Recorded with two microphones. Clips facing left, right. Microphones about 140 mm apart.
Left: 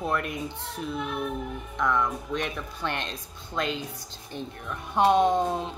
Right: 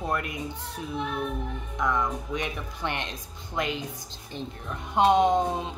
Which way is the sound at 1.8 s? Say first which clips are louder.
Left 1 dB; 15° right (ahead or behind).